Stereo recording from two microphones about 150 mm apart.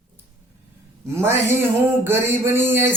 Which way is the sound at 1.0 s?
15° right (ahead or behind).